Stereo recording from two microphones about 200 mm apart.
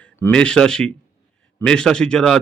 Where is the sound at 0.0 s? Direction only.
5° left (ahead or behind).